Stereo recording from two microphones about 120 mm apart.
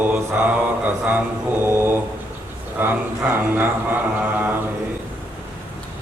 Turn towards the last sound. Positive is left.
turn(degrees=-15)  # may be behind; listen again after turning